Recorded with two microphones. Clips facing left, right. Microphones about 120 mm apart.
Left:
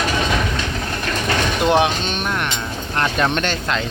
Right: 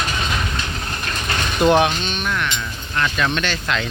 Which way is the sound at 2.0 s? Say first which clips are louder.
Left 1 dB; 40° left (ahead or behind).